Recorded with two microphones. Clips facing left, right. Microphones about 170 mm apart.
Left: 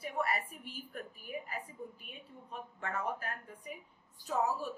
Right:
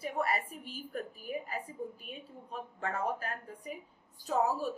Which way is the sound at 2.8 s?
35° right (ahead or behind).